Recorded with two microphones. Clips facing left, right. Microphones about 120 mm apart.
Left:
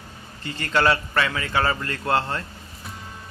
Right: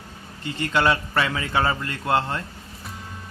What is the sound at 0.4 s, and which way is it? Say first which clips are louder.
A man's voice: even; 15° right (ahead or behind).